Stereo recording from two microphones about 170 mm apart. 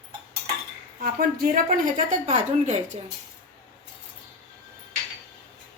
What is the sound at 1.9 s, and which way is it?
Speech, 40° right (ahead or behind).